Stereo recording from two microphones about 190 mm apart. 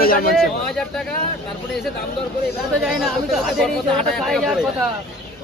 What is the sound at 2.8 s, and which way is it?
Speech, centre (ahead or behind).